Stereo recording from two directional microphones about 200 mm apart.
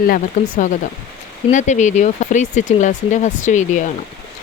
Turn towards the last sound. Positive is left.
turn(degrees=35)  # may be behind; listen again after turning